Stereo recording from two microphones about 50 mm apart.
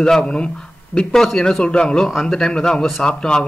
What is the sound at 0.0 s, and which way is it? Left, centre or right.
Speech, centre.